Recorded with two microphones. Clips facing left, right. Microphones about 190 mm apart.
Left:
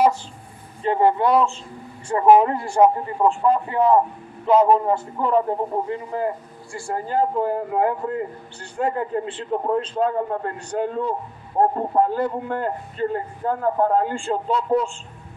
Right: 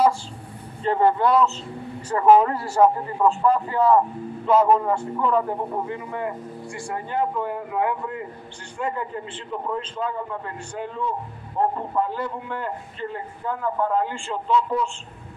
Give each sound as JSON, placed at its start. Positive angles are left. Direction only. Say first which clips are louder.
{"t": 0.8, "sound": "a man's voice", "louder": "left 1 dB", "side_deg": 25}